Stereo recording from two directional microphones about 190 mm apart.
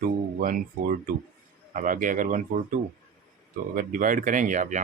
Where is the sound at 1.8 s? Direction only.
45° right (ahead or behind).